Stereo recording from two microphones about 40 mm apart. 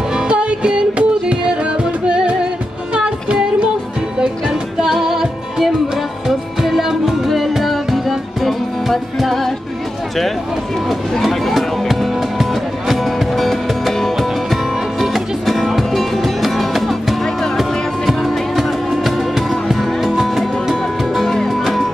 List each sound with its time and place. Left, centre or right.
0.1 s music: right
4.5 s music: centre
10.9 s music: centre
21.2 s music: centre